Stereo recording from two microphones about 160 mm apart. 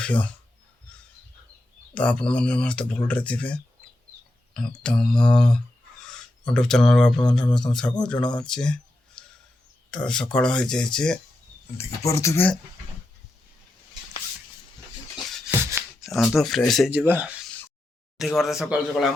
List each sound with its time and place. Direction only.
0.0 s speech: 10° left (ahead or behind)
2.0 s speech: 5° left (ahead or behind)
11.8 s speech: 20° left (ahead or behind)
15.8 s a sound: 15° right (ahead or behind)
16.1 s speech: centre (ahead or behind)
16.9 s speech: 10° right (ahead or behind)